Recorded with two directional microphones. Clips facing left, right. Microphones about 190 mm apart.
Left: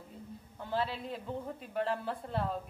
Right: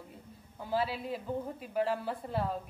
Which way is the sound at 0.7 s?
5° right (ahead or behind).